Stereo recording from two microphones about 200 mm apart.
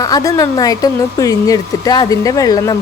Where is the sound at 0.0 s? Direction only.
15° left (ahead or behind).